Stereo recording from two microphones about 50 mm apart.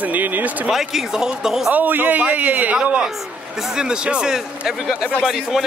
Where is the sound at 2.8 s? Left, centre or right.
Right.